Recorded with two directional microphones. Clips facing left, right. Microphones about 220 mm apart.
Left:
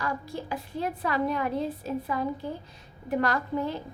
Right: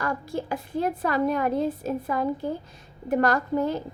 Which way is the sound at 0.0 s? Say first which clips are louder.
Right 4 dB; 50° right (ahead or behind).